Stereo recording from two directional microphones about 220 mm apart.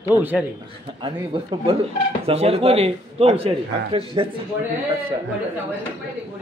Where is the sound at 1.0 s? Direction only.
25° right (ahead or behind).